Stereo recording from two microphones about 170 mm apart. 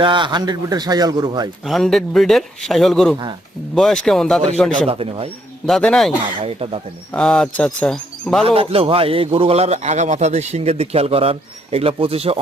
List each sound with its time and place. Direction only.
0.0 s a man's voice: 30° right (ahead or behind)
1.6 s speech: centre (ahead or behind)
4.9 s speech: 35° right (ahead or behind)
5.6 s speech: 5° left (ahead or behind)
6.4 s speech: 35° right (ahead or behind)
7.1 s speech: 5° left (ahead or behind)
8.4 s speech: 35° right (ahead or behind)